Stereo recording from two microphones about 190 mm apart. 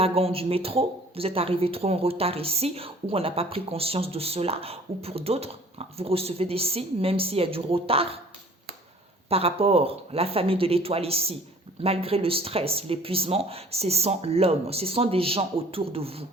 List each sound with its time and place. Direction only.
0.0 s speech: 30° right (ahead or behind)
9.3 s speech: 30° right (ahead or behind)